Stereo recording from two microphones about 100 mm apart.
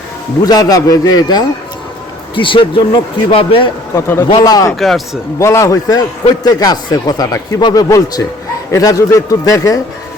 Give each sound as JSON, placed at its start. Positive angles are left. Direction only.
{"t": 0.4, "sound": "a man's voice", "side_deg": 40}
{"t": 2.3, "sound": "speech", "side_deg": 60}
{"t": 3.9, "sound": "a man's voice", "side_deg": 25}
{"t": 4.4, "sound": "a man's voice", "side_deg": 40}
{"t": 4.8, "sound": "a man's voice", "side_deg": 0}
{"t": 5.4, "sound": "a man's voice", "side_deg": 30}